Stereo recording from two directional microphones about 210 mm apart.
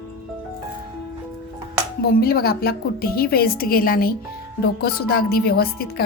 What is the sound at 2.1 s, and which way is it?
Speech, 45° left (ahead or behind).